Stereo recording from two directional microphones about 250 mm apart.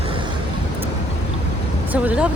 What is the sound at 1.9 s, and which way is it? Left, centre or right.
Speech, centre.